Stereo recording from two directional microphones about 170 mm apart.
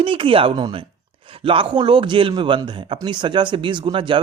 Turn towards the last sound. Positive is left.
turn(degrees=-30)  # may be behind; listen again after turning